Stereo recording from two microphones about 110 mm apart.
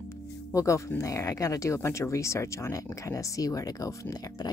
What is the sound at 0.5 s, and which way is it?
Speech, 30° left (ahead or behind).